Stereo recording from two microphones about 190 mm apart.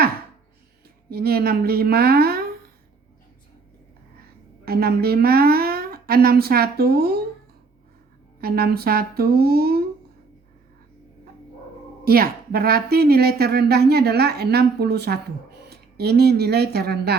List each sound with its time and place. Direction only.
1.1 s speech: 55° right (ahead or behind)
4.6 s a woman's voice: 55° right (ahead or behind)
8.4 s speech: 55° right (ahead or behind)
12.0 s a woman's voice: 50° right (ahead or behind)